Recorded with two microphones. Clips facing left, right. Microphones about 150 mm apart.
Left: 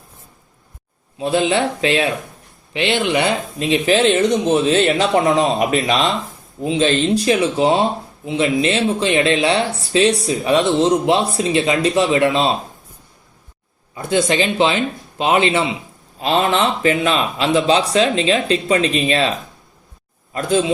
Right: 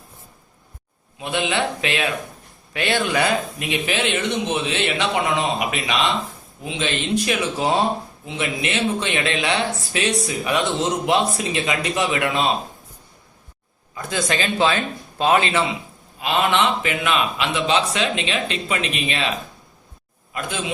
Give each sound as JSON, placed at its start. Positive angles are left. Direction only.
{"t": 1.2, "sound": "speech", "side_deg": 35}
{"t": 13.9, "sound": "speech", "side_deg": 25}
{"t": 16.2, "sound": "speech", "side_deg": 35}
{"t": 20.3, "sound": "speech", "side_deg": 35}